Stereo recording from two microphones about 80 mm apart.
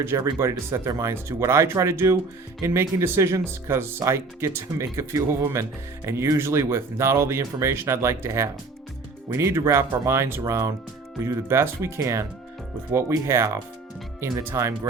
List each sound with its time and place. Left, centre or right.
0.3 s speech: right